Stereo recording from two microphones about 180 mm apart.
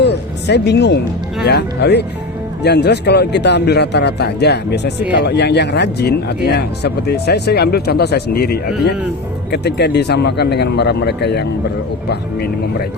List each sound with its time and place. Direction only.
0.0 s music: 70° left (ahead or behind)
1.5 s a man's voice: 65° left (ahead or behind)